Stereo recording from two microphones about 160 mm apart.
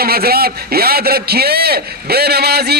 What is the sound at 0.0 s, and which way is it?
A man's voice, 75° right (ahead or behind).